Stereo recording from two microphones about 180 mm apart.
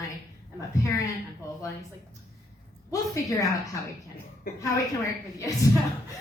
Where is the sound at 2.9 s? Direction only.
20° left (ahead or behind).